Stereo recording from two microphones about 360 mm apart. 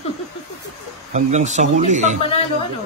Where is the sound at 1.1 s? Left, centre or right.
Centre.